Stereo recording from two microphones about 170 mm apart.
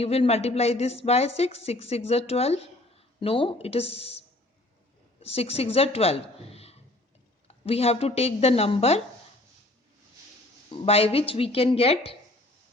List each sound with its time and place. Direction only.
0.0 s a woman's voice: 35° left (ahead or behind)
5.2 s a woman's voice: 35° left (ahead or behind)
10.7 s a woman's voice: 35° left (ahead or behind)